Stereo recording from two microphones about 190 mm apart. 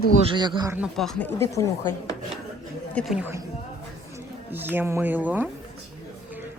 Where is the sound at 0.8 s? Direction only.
Centre (ahead or behind).